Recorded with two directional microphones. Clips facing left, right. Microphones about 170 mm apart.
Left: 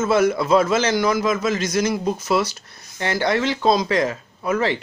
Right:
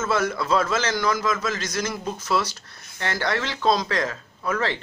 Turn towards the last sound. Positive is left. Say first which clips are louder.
# left 5 dB
turn(degrees=15)  # may be behind; listen again after turning